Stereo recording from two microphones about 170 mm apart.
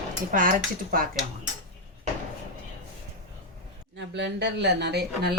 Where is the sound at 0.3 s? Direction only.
55° right (ahead or behind).